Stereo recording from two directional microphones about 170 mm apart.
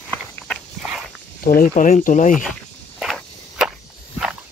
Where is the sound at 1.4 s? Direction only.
55° left (ahead or behind).